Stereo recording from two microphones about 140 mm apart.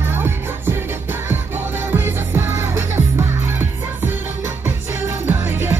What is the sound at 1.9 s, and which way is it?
Music, 15° right (ahead or behind).